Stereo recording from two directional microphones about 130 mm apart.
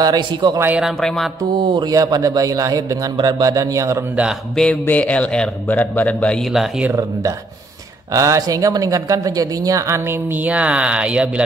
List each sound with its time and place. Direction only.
0.0 s speech: 35° right (ahead or behind)
0.6 s speech: 15° right (ahead or behind)
0.8 s music: 5° left (ahead or behind)
1.7 s speech: 30° right (ahead or behind)
4.1 s speech: 5° right (ahead or behind)
4.6 s a man's voice: 10° left (ahead or behind)
6.9 s speech: 25° right (ahead or behind); by 11.4 s 10° right (ahead or behind)